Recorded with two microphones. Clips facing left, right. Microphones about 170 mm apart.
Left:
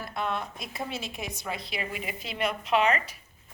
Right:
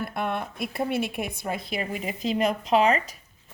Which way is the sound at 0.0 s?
55° right (ahead or behind).